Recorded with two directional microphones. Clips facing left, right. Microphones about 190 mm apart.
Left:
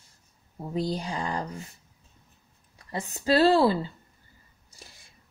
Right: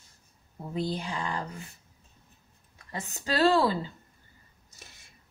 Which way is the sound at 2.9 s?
35° left (ahead or behind).